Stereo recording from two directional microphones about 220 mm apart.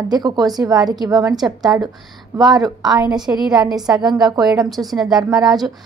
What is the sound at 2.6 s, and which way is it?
Speech, 15° right (ahead or behind).